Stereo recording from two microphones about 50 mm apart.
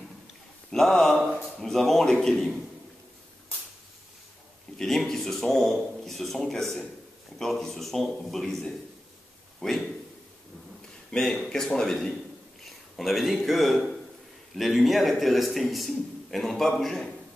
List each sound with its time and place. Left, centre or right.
0.7 s a man's voice: centre
4.7 s a man's voice: centre
11.1 s a man's voice: centre